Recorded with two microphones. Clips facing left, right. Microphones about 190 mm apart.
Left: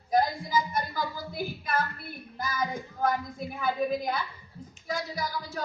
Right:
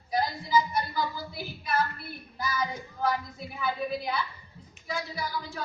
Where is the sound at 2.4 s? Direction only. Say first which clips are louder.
Even; 50° left (ahead or behind).